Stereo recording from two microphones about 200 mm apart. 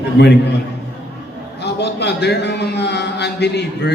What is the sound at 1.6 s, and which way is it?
A man's voice, 55° left (ahead or behind).